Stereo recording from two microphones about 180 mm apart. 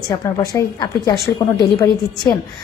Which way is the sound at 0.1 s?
20° left (ahead or behind).